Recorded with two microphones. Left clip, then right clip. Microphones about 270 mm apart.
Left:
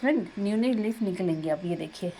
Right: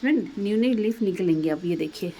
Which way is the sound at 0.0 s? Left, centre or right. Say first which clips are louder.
Right 2 dB; centre.